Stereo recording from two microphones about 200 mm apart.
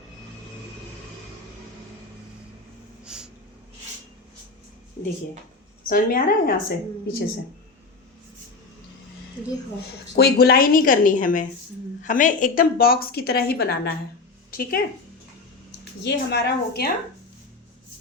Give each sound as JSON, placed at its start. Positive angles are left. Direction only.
{"t": 3.0, "sound": "snort", "side_deg": -5}
{"t": 5.0, "sound": "a sound", "side_deg": 45}
{"t": 5.9, "sound": "a woman's voice", "side_deg": 45}
{"t": 10.2, "sound": "a woman's voice", "side_deg": 50}
{"t": 16.0, "sound": "a woman's voice", "side_deg": 55}